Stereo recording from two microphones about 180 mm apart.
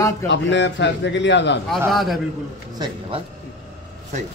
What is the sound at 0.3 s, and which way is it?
A man's voice, 85° left.